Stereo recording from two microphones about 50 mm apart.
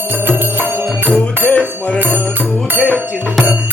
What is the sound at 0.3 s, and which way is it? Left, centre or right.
Music, right.